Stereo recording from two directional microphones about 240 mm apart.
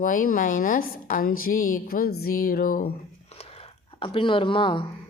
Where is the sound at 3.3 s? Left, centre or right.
Left.